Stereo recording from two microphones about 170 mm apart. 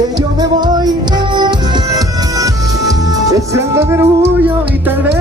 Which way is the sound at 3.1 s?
20° right (ahead or behind).